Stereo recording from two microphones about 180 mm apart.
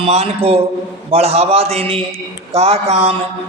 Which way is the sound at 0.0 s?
35° right (ahead or behind).